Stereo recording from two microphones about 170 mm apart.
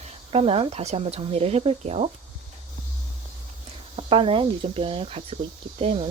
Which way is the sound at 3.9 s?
35° right (ahead or behind).